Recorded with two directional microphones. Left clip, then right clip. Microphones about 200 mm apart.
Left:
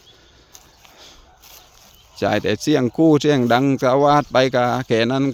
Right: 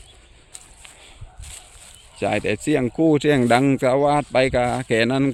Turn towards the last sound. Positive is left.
turn(degrees=5)  # may be behind; listen again after turning